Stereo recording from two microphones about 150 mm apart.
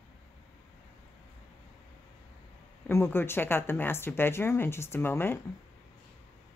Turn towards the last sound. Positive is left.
turn(degrees=15)  # may be behind; listen again after turning